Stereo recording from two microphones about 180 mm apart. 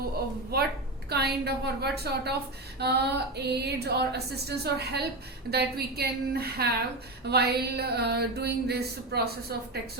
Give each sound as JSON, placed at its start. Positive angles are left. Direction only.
{"t": 1.1, "sound": "a woman's voice", "side_deg": -65}